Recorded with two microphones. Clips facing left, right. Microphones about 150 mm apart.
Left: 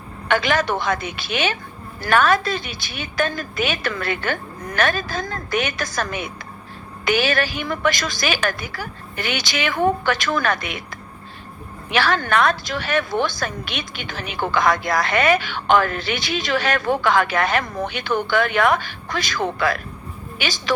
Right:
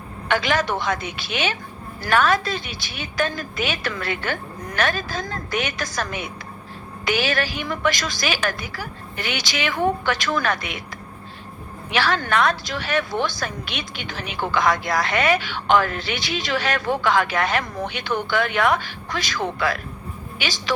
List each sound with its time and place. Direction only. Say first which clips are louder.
0.3 s speech: left 2 dB; 55° left (ahead or behind)
11.9 s speech: left 2 dB; 50° left (ahead or behind)